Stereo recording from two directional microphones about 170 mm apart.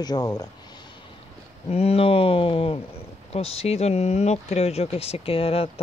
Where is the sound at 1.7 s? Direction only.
35° left (ahead or behind).